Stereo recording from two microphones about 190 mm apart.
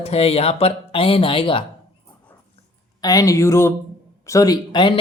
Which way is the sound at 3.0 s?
20° left (ahead or behind).